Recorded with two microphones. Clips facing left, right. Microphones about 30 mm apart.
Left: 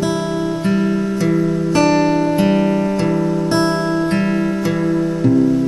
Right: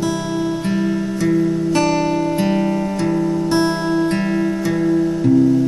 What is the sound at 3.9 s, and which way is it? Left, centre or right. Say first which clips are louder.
Music: even; centre.